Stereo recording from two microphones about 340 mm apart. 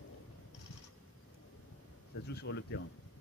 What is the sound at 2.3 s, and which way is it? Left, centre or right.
Speech, left.